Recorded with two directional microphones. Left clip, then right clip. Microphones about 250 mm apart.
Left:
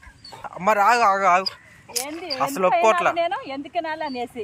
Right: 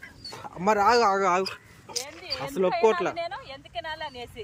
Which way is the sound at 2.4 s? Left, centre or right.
Centre.